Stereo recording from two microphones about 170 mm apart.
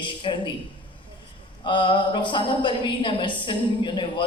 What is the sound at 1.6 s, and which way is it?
Speech, 30° left (ahead or behind).